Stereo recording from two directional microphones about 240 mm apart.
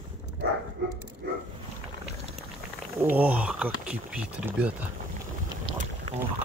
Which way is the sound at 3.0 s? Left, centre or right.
Centre.